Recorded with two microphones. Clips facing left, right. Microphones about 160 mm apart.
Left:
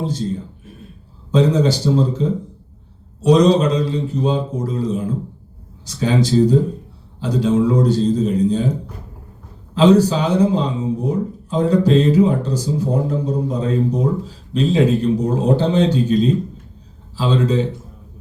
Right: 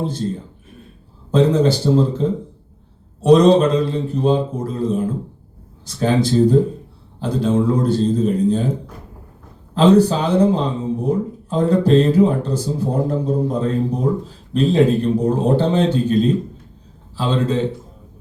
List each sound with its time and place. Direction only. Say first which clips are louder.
0.0 s speech: even; 55° right (ahead or behind)
1.3 s speech: right 1 dB; 55° right (ahead or behind)
9.7 s speech: even; 55° right (ahead or behind)
17.2 s speech: left 1 dB; 55° right (ahead or behind)